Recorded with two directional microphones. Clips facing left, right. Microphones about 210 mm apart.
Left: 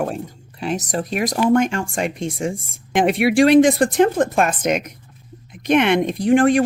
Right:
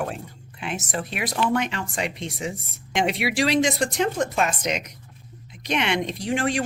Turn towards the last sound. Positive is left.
turn(degrees=50)  # may be behind; listen again after turning